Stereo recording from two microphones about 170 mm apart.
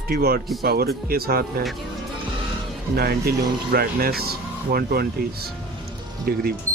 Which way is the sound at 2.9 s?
65° right (ahead or behind).